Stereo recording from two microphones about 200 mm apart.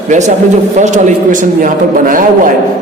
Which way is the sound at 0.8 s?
40° right (ahead or behind).